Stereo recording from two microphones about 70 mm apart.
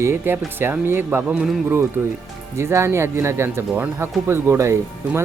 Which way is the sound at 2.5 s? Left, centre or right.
Right.